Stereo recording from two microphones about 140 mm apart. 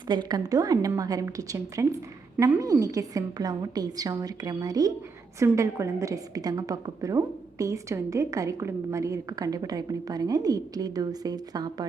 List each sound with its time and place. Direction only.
0.1 s a woman's voice: 30° right (ahead or behind)